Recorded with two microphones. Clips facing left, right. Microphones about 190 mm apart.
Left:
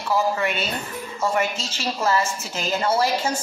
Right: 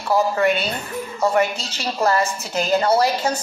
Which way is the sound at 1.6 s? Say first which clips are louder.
Even; 45° left (ahead or behind).